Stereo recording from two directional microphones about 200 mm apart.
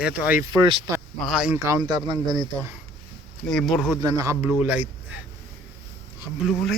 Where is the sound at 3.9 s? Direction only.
20° right (ahead or behind).